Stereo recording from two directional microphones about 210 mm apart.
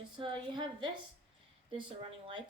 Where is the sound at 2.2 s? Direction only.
20° right (ahead or behind).